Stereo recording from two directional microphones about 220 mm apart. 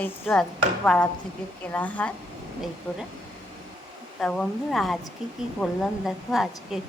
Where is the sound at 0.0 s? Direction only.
10° left (ahead or behind).